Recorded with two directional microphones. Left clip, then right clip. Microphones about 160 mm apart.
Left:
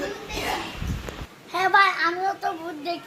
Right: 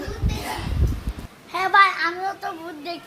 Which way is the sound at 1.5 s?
40° right (ahead or behind).